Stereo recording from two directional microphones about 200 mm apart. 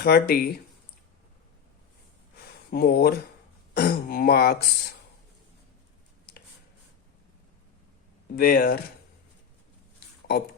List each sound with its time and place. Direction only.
0.0 s speech: 50° left (ahead or behind)
2.6 s speech: 50° left (ahead or behind)
8.4 s speech: 45° left (ahead or behind)